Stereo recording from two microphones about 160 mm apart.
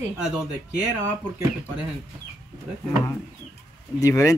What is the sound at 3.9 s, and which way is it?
Speech, 20° left (ahead or behind).